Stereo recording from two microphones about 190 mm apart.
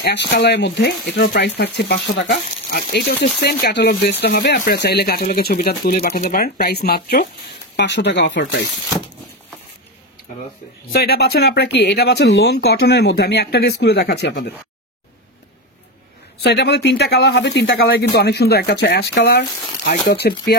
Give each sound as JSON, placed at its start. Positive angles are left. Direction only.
{"t": 0.0, "sound": "speech", "side_deg": 60}
{"t": 7.7, "sound": "speech", "side_deg": 65}
{"t": 10.9, "sound": "speech", "side_deg": 55}
{"t": 16.4, "sound": "speech", "side_deg": 60}